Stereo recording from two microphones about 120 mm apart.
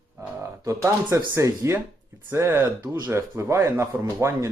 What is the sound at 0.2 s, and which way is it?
Speech, 25° right (ahead or behind).